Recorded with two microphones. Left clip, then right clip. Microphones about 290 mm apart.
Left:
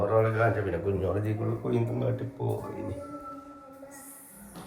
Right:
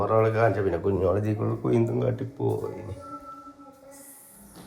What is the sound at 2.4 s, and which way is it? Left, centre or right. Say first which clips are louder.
Speech: right 6 dB; right.